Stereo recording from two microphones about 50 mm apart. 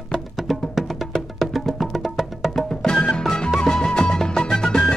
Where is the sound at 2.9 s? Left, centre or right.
Centre.